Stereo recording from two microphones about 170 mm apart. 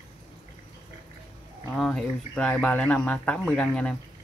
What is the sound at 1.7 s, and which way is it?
Speech, 5° left (ahead or behind).